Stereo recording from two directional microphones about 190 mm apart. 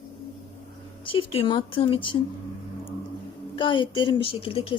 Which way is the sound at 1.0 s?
30° left (ahead or behind).